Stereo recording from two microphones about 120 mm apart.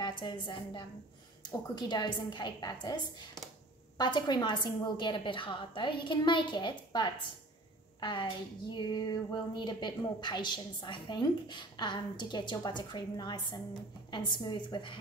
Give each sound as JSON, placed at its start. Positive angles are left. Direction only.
{"t": 0.0, "sound": "a woman's voice", "side_deg": 40}